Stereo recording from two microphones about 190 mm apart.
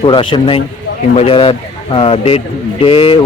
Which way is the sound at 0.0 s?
25° left (ahead or behind).